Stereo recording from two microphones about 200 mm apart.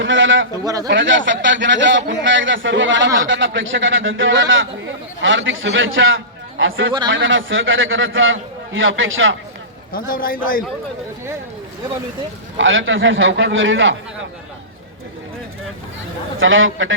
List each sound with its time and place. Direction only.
0.0 s a sound: 75° right (ahead or behind)
0.5 s a man's voice: 20° right (ahead or behind)
0.9 s a man's voice: 70° right (ahead or behind)
9.9 s a man's voice: 45° left (ahead or behind)
12.5 s a man's voice: 75° right (ahead or behind)
16.4 s a man's voice: 80° right